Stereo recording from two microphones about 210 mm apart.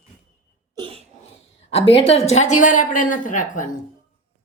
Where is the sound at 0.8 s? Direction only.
25° right (ahead or behind).